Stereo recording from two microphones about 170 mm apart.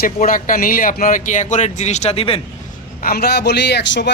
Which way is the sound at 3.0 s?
65° left (ahead or behind).